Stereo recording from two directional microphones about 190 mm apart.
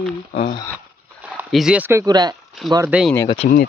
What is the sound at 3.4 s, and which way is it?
Speech, 40° left (ahead or behind).